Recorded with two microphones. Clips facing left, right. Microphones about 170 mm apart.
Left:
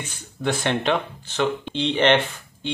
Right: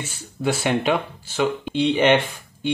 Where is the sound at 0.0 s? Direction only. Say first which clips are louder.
Right 2 dB; 5° right (ahead or behind).